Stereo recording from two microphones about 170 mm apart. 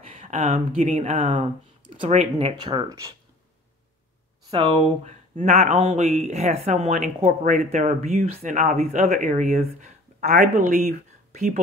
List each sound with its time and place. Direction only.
0.2 s speech: 45° right (ahead or behind)
2.6 s speech: 25° right (ahead or behind)
4.5 s speech: 30° right (ahead or behind)
5.0 s speech: 40° right (ahead or behind)
8.4 s speech: 50° right (ahead or behind)